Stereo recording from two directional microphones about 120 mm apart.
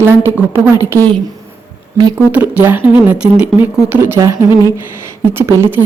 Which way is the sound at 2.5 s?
15° right (ahead or behind).